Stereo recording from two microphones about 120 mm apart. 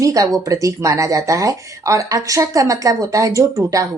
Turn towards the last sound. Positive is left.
turn(degrees=-25)  # may be behind; listen again after turning